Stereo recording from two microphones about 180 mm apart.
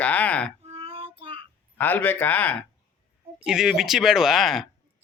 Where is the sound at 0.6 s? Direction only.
35° right (ahead or behind).